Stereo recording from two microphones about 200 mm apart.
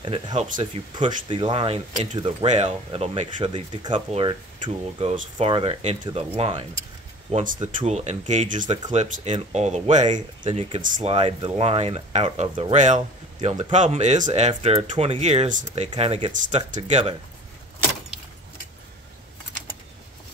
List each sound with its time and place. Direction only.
0.0 s speech: 25° right (ahead or behind)